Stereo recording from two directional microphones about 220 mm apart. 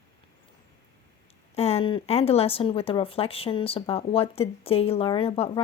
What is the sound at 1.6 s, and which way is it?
Speech, 25° left (ahead or behind).